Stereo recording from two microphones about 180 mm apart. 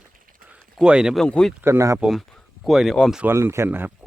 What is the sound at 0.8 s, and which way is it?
Speech, 5° right (ahead or behind).